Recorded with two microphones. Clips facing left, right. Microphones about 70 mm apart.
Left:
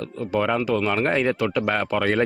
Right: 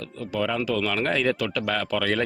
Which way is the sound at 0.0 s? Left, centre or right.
Left.